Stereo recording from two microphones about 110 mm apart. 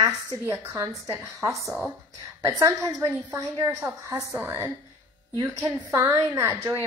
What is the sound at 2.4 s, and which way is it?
A woman's voice, 30° right (ahead or behind).